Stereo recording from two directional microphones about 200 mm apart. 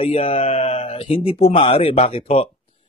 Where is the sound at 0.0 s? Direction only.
30° left (ahead or behind).